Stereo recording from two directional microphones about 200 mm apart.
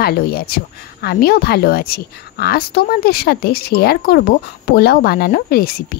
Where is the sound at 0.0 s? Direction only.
50° left (ahead or behind).